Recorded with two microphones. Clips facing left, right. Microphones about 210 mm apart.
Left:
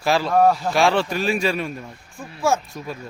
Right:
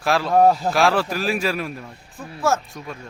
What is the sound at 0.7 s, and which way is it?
Speech, centre (ahead or behind).